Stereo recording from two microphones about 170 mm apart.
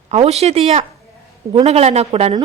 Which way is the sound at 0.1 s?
40° right (ahead or behind).